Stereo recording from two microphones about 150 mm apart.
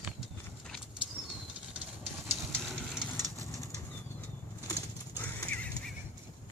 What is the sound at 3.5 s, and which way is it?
Bird flight, 25° left (ahead or behind).